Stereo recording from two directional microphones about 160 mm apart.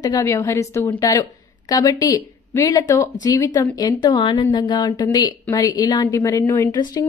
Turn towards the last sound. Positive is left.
turn(degrees=20)  # may be behind; listen again after turning